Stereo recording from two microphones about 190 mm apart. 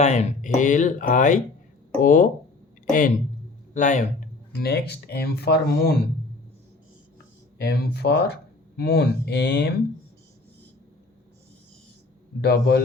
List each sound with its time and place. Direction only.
0.0 s speech: 35° left (ahead or behind)
3.8 s speech: 40° left (ahead or behind)
4.5 s speech: 60° left (ahead or behind)
7.6 s speech: 60° left (ahead or behind)
12.4 s speech: 60° left (ahead or behind)